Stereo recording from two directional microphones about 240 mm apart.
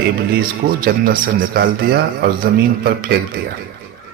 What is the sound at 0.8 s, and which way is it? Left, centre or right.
A man's voice, right.